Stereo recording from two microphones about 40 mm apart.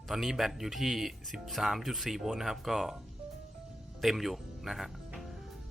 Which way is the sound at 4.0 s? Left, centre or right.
Centre.